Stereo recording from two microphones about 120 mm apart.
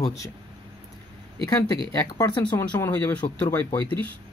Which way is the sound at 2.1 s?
35° left (ahead or behind).